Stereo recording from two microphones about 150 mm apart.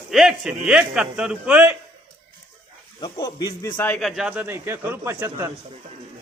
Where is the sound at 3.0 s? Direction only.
25° left (ahead or behind).